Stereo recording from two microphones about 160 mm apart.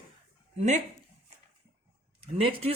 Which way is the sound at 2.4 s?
35° right (ahead or behind).